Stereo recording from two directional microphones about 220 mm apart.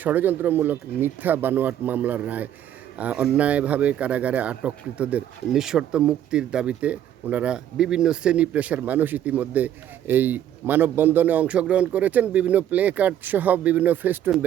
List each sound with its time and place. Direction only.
0.0 s speech: 10° right (ahead or behind)